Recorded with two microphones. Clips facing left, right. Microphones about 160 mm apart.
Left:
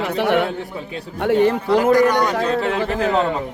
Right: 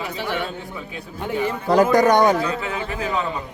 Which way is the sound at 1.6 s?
45° right (ahead or behind).